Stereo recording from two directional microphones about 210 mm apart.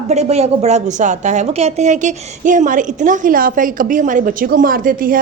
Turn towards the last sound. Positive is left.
turn(degrees=-40)  # may be behind; listen again after turning